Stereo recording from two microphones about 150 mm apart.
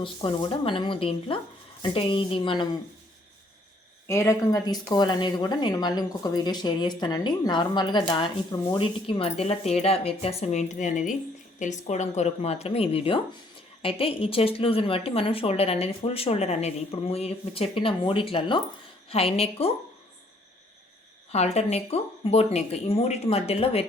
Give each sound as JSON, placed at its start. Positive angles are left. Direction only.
{"t": 0.0, "sound": "a woman's voice", "side_deg": 35}
{"t": 4.1, "sound": "a woman's voice", "side_deg": 20}
{"t": 21.3, "sound": "speech", "side_deg": 45}